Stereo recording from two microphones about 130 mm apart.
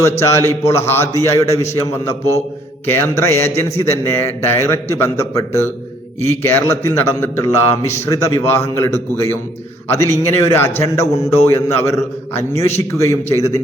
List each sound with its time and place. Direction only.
0.0 s a man's voice: 20° left (ahead or behind)